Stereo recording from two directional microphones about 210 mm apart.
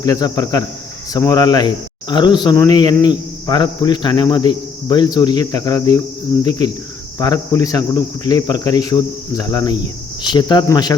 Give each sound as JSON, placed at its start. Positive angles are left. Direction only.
{"t": 0.0, "sound": "speech", "side_deg": 20}